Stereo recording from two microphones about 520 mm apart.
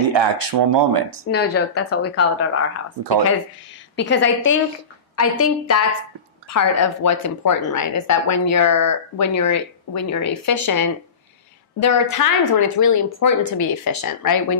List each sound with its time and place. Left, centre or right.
0.0 s speech: right
1.3 s speech: centre
3.9 s speech: centre